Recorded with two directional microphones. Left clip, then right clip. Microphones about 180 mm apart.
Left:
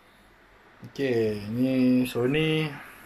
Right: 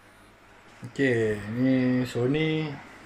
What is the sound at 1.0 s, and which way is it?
Speech, 5° left (ahead or behind).